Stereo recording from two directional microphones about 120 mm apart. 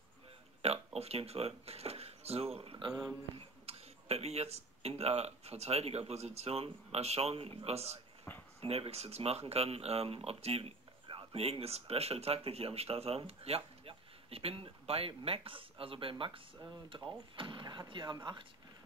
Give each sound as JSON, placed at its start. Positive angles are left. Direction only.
{"t": 0.6, "sound": "speech", "side_deg": -60}
{"t": 3.3, "sound": "speech", "side_deg": -60}